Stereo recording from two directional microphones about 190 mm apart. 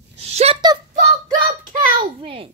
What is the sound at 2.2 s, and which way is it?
Speech, 30° right (ahead or behind).